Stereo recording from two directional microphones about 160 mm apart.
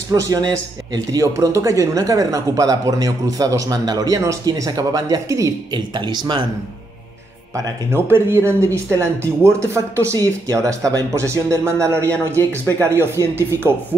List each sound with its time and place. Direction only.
0.1 s a man's voice: 20° right (ahead or behind)
7.5 s speech: 15° right (ahead or behind)